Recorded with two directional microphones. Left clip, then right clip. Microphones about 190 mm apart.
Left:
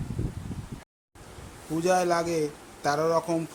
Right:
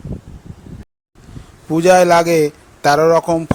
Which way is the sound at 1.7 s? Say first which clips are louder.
Right 14 dB; 45° right (ahead or behind).